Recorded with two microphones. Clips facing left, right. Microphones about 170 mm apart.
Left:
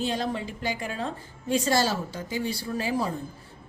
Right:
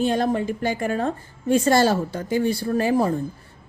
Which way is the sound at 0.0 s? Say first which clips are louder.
Right 8 dB; 55° right (ahead or behind).